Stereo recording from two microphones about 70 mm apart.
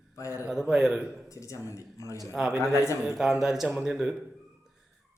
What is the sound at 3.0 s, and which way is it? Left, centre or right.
Speech, centre.